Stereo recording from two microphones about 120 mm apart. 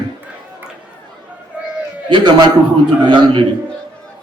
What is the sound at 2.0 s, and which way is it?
A man's voice, 40° right (ahead or behind).